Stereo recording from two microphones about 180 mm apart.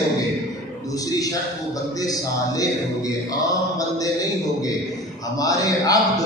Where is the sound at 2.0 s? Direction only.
20° left (ahead or behind).